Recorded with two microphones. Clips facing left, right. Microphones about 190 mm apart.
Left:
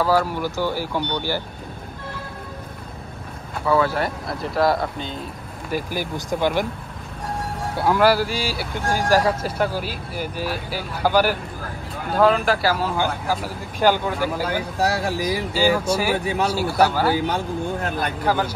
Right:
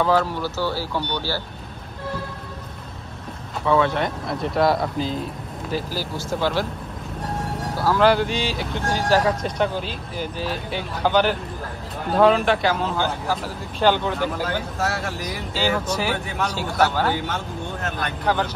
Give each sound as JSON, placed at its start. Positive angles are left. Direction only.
{"t": 0.0, "sound": "speech", "side_deg": 10}
{"t": 3.6, "sound": "speech", "side_deg": 5}
{"t": 5.7, "sound": "speech", "side_deg": 15}
{"t": 7.7, "sound": "speech", "side_deg": 20}
{"t": 8.0, "sound": "speech", "side_deg": 5}